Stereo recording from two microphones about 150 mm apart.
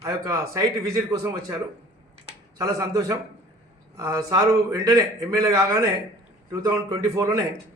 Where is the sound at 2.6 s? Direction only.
25° right (ahead or behind).